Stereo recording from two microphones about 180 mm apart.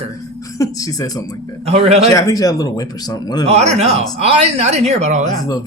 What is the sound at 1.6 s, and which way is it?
Speech, 35° right (ahead or behind).